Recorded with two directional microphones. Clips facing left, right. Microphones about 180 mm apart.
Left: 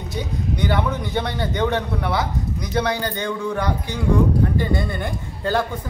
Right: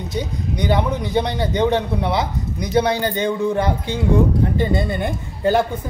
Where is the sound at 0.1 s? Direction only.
20° right (ahead or behind).